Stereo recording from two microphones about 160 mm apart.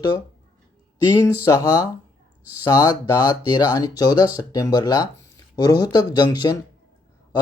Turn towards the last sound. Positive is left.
turn(degrees=25)  # may be behind; listen again after turning